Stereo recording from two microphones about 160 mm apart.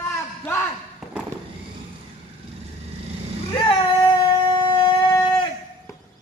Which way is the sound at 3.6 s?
30° left (ahead or behind).